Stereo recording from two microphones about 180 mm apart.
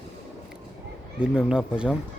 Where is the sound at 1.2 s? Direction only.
5° right (ahead or behind).